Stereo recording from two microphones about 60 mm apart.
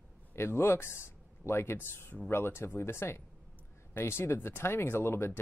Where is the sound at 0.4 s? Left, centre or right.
Left.